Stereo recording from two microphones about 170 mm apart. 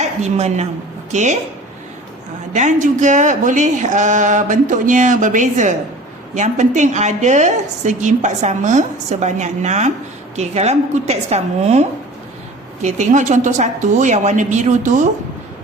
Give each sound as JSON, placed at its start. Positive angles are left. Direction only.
{"t": 0.0, "sound": "a woman's voice", "side_deg": -40}
{"t": 2.5, "sound": "a woman's voice", "side_deg": -45}